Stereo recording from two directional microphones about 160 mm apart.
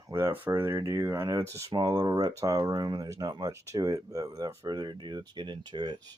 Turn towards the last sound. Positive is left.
turn(degrees=-25)  # may be behind; listen again after turning